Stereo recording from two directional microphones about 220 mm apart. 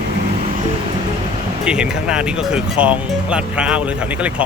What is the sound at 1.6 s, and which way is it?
Speech, 5° right (ahead or behind).